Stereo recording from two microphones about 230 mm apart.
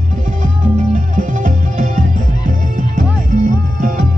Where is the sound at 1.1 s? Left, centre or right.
Right.